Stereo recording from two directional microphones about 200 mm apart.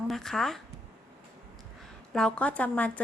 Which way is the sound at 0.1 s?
Centre (ahead or behind).